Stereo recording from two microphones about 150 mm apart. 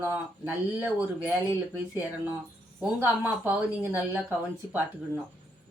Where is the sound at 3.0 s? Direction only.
10° right (ahead or behind).